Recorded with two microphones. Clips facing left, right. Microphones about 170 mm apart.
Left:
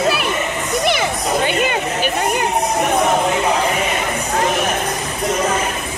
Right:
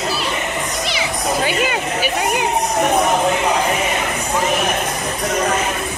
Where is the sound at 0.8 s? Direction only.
55° left (ahead or behind).